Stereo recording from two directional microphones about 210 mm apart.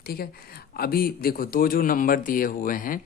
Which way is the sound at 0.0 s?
45° left (ahead or behind).